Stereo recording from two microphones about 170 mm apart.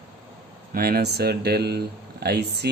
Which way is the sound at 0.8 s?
65° right (ahead or behind).